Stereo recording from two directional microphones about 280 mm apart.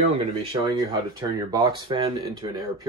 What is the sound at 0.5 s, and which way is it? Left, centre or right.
Speech, centre.